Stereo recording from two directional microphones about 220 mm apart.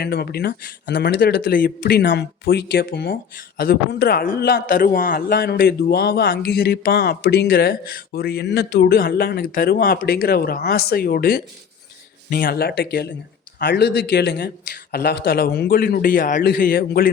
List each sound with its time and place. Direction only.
0.0 s a man's voice: 45° left (ahead or behind)